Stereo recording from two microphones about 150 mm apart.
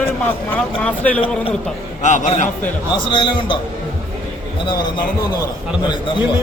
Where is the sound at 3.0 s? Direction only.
35° left (ahead or behind).